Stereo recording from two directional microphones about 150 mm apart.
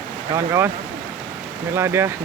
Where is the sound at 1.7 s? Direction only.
15° right (ahead or behind).